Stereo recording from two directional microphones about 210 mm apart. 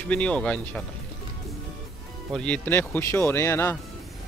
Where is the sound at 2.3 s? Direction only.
5° left (ahead or behind).